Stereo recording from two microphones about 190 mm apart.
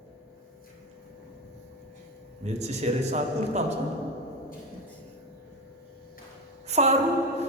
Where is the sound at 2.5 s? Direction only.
35° right (ahead or behind).